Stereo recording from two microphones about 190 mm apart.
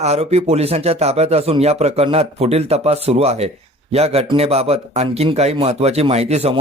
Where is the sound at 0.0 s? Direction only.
35° right (ahead or behind).